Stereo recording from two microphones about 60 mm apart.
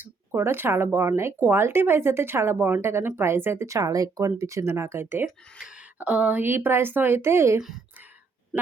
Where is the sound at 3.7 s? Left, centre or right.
Right.